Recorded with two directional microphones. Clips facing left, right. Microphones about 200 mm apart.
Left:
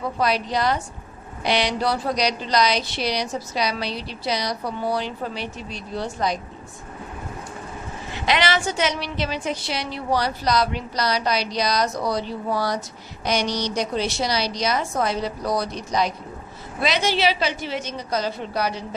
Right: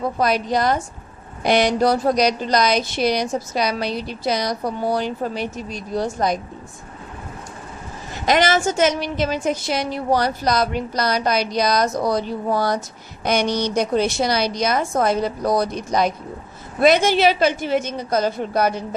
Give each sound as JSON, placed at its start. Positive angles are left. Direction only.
{"t": 0.2, "sound": "a woman's voice", "side_deg": -45}
{"t": 8.1, "sound": "a woman's voice", "side_deg": -45}